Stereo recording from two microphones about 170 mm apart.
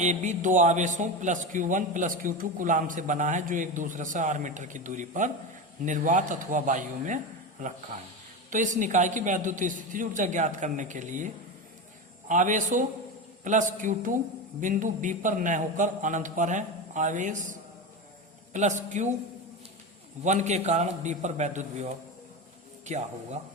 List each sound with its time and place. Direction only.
0.0 s a man's voice: 45° right (ahead or behind)
8.4 s a man's voice: 50° right (ahead or behind)
12.3 s a man's voice: 50° right (ahead or behind)
20.2 s a man's voice: 40° right (ahead or behind)